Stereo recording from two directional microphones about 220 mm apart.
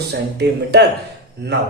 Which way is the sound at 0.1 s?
50° right (ahead or behind).